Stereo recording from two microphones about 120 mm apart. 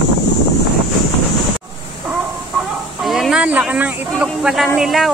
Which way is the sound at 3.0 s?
Centre (ahead or behind).